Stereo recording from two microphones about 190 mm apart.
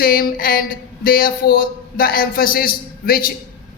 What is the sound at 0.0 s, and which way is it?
A man's voice, 50° left (ahead or behind).